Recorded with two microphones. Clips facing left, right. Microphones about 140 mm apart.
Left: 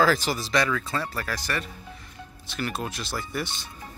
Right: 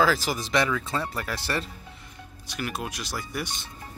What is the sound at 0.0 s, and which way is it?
Speech, 10° right (ahead or behind).